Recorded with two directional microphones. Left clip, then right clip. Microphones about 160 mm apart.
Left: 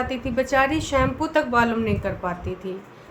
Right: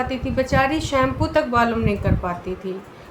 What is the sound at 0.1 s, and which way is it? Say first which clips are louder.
Speech: right 1 dB; 25° left (ahead or behind).